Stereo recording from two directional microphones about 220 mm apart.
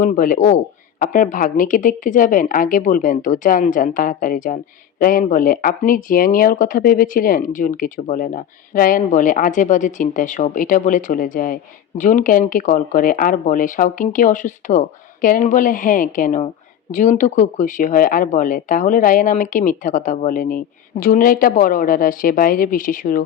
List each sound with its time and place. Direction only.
0.0 s speech: 40° left (ahead or behind)